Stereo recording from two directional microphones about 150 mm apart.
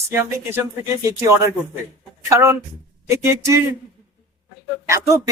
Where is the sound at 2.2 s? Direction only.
15° right (ahead or behind).